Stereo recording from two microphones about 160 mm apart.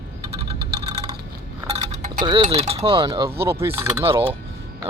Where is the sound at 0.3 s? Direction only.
35° right (ahead or behind).